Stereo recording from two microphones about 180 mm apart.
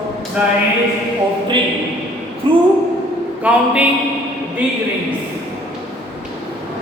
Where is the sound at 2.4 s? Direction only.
30° right (ahead or behind).